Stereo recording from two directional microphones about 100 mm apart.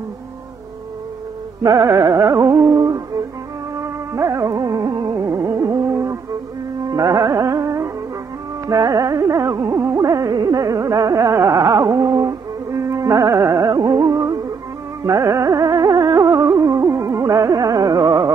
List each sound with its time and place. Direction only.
1.6 s carnatic music: 35° right (ahead or behind)
3.8 s music: 30° right (ahead or behind)
6.9 s carnatic music: 45° right (ahead or behind)
11.5 s carnatic music: 50° right (ahead or behind)
11.8 s a sound: 35° right (ahead or behind)
12.8 s carnatic music: 30° right (ahead or behind)
13.6 s music: 40° right (ahead or behind)
17.2 s carnatic music: 40° right (ahead or behind)